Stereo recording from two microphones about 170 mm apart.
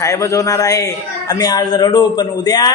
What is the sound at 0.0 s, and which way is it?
A man's voice, 20° left (ahead or behind).